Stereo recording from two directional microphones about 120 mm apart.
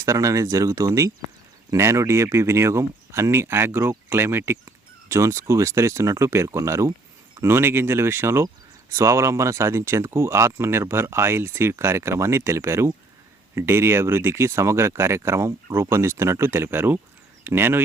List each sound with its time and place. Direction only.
0.0 s speech: 25° right (ahead or behind)